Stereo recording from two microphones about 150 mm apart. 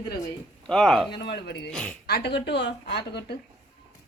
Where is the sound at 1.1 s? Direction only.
90° left.